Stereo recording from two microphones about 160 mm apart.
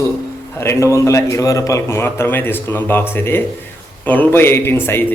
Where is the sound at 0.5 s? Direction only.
15° left (ahead or behind).